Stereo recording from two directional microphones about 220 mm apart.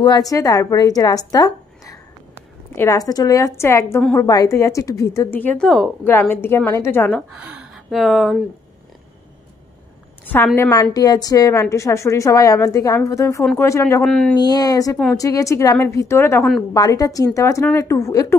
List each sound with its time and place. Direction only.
0.0 s a woman's voice: 15° left (ahead or behind); by 8.4 s centre (ahead or behind)
10.3 s a woman's voice: 10° left (ahead or behind)